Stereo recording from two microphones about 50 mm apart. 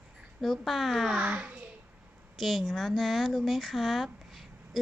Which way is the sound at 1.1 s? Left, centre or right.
Right.